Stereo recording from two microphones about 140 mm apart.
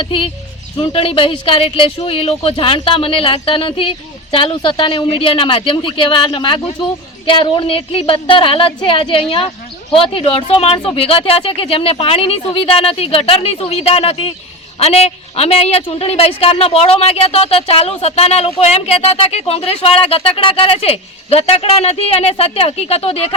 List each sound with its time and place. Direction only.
0.0 s a woman's voice: 40° left (ahead or behind)